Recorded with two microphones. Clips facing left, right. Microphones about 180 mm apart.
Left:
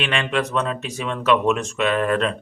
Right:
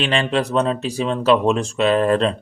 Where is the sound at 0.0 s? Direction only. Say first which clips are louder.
Right 3 dB; 30° right (ahead or behind).